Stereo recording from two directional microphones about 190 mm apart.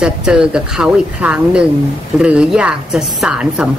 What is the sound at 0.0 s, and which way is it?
Speech, 5° right (ahead or behind).